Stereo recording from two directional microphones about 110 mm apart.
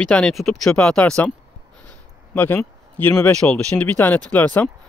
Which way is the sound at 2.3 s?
20° left (ahead or behind).